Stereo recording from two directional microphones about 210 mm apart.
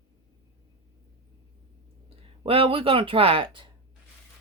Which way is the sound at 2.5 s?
25° right (ahead or behind).